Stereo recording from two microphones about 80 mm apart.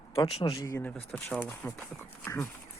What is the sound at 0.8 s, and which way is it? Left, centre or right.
Speech, centre.